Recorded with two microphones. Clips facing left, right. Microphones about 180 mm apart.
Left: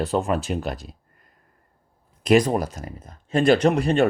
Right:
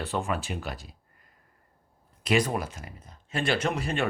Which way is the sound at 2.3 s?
40° left (ahead or behind).